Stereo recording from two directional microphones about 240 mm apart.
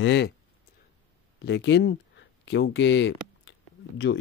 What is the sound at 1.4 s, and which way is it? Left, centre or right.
Speech, left.